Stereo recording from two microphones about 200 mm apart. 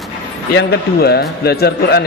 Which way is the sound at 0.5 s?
55° left (ahead or behind).